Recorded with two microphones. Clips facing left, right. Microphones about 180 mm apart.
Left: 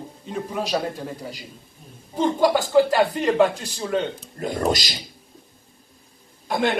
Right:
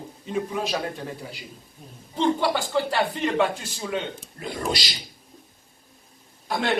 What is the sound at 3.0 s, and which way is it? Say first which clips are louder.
A man's voice: left 5 dB; 45° left (ahead or behind).